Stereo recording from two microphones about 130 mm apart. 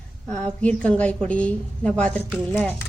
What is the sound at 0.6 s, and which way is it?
Speech, 10° left (ahead or behind).